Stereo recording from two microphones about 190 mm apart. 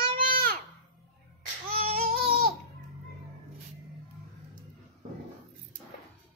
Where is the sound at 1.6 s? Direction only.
50° right (ahead or behind).